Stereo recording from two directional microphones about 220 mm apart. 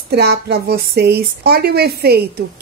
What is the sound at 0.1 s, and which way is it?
Speech, 45° right (ahead or behind).